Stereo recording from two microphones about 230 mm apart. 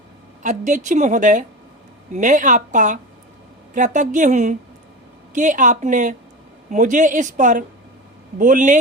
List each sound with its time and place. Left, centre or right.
0.4 s speech: right